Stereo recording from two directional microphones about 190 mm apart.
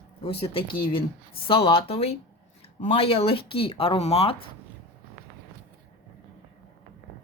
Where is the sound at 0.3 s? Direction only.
30° left (ahead or behind).